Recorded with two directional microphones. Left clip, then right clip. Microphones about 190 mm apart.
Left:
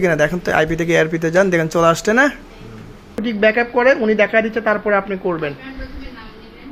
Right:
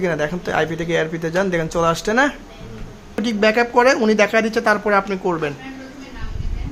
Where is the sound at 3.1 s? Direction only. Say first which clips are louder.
Left 1 dB; 5° right (ahead or behind).